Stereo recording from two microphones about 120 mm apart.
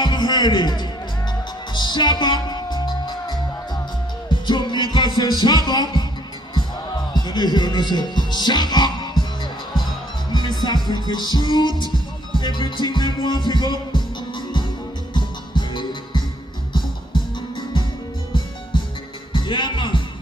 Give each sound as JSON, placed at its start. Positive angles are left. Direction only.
{"t": 0.0, "sound": "music", "side_deg": 40}
{"t": 7.2, "sound": "speech", "side_deg": 35}
{"t": 10.3, "sound": "music", "side_deg": 35}
{"t": 15.1, "sound": "music", "side_deg": 40}
{"t": 19.3, "sound": "music", "side_deg": 40}